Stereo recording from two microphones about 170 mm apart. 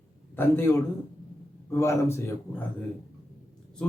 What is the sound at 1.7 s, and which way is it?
Speech, 15° left (ahead or behind).